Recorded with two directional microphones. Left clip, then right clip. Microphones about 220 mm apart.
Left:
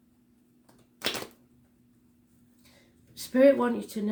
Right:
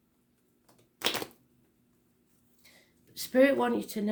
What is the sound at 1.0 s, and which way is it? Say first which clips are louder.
Typewriter: right 1 dB; 25° right (ahead or behind).